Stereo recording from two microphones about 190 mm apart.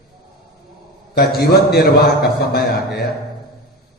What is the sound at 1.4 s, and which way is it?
A man's voice, 55° left (ahead or behind).